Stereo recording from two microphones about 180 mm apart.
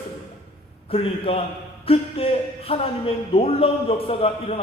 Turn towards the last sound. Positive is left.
turn(degrees=35)  # may be behind; listen again after turning